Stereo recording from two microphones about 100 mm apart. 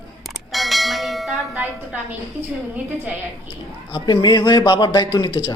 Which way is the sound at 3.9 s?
50° left (ahead or behind).